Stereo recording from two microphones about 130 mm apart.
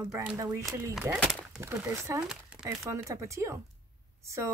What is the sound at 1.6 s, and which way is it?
Speech, 20° right (ahead or behind).